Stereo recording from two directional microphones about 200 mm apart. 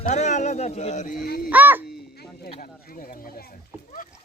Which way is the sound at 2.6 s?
45° left (ahead or behind).